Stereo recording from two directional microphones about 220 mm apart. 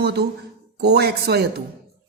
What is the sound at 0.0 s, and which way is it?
Speech, 50° right (ahead or behind).